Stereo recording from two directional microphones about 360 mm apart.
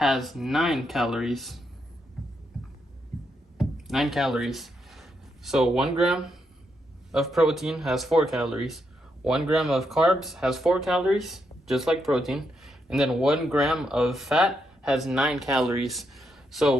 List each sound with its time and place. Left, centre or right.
0.0 s speech: centre
3.6 s speech: centre